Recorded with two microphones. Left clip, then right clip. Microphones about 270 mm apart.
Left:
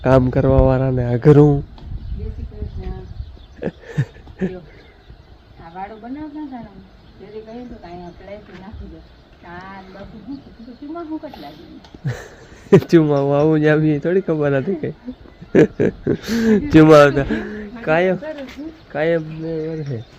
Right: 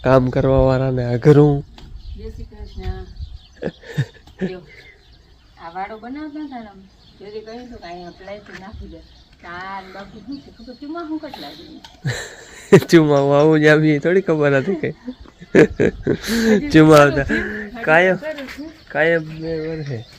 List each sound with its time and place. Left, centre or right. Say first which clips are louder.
0.0 s speech: even; centre
3.6 s a sound: even; centre
10.9 s speech: right 1 dB; centre
16.6 s speech: left 1 dB; centre
16.9 s a man's voice: left 2 dB; left
17.3 s speech: right 4 dB; centre